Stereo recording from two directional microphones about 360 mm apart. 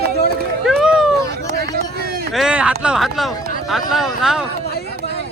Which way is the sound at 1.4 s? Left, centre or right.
Right.